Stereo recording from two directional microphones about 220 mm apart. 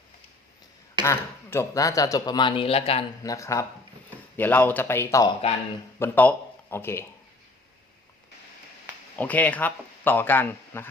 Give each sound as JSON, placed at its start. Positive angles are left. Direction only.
{"t": 1.0, "sound": "speech", "side_deg": 10}
{"t": 3.2, "sound": "speech", "side_deg": 15}
{"t": 9.1, "sound": "speech", "side_deg": 5}